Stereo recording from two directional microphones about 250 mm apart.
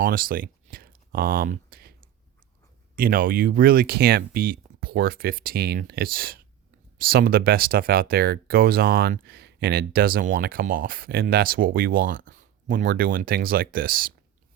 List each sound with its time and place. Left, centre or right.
0.0 s speech: right
2.9 s speech: right